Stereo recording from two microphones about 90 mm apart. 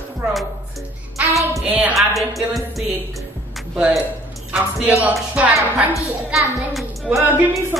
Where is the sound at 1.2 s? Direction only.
15° right (ahead or behind).